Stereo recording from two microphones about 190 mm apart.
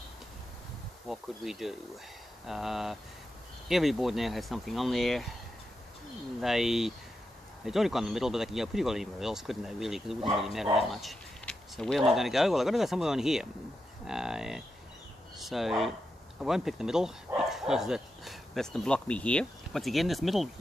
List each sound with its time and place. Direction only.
1.0 s speech: centre (ahead or behind)
6.4 s speech: centre (ahead or behind)